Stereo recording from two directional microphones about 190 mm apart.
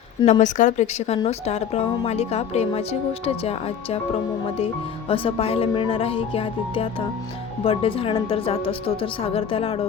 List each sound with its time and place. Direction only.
0.3 s a woman's voice: 40° left (ahead or behind)
4.5 s speech: 30° left (ahead or behind)